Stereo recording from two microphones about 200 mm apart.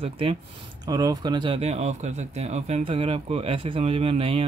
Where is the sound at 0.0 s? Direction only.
30° right (ahead or behind).